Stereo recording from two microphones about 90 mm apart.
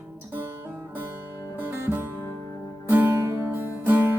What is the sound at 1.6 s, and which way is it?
Music, 25° right (ahead or behind).